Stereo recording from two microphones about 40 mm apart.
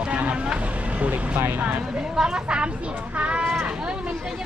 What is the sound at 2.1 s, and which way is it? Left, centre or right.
Speech, centre.